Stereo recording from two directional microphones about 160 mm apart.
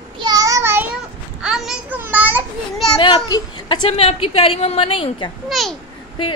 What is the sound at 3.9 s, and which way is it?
A woman's voice, 40° left (ahead or behind).